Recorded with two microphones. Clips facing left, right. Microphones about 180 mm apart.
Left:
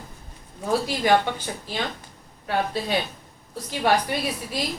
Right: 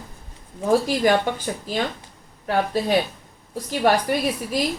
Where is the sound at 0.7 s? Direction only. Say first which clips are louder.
Right 3 dB; 45° right (ahead or behind).